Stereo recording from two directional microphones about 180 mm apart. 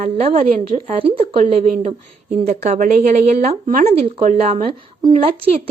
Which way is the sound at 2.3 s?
35° right (ahead or behind).